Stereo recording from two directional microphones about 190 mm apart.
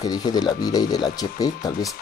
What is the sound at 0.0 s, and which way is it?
Speech, 20° left (ahead or behind).